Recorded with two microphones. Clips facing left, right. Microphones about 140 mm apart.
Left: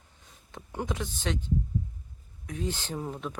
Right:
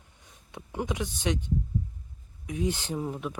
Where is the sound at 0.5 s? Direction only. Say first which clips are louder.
Right 2 dB; 15° right (ahead or behind).